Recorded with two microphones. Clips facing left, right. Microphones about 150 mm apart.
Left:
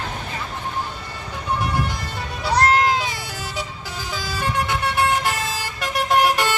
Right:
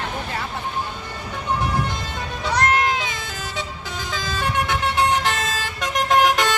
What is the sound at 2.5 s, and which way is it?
Music, 35° left (ahead or behind).